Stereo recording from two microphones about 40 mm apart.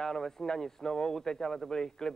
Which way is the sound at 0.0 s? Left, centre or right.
Centre.